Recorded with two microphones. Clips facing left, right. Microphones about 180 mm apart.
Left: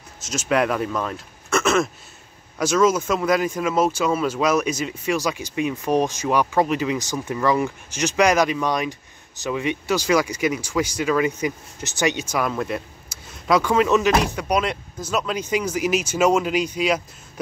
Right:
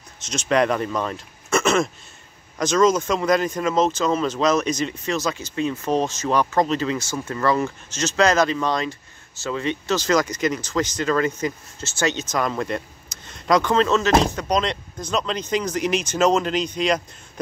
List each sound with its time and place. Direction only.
0.2 s speech: 5° left (ahead or behind)